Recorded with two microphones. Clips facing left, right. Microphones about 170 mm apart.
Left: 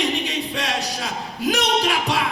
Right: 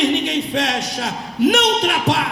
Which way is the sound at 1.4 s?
65° right (ahead or behind).